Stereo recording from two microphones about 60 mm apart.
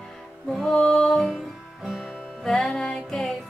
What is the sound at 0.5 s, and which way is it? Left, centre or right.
Music, centre.